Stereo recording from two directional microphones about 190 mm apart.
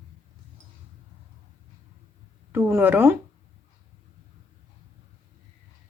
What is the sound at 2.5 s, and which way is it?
Speech, 10° right (ahead or behind).